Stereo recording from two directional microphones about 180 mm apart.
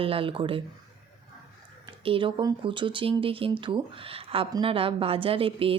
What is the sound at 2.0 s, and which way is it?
Speech, 30° right (ahead or behind).